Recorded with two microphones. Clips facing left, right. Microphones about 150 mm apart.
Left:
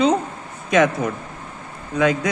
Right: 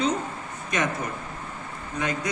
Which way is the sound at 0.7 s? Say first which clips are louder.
Left 10 dB; 90° left.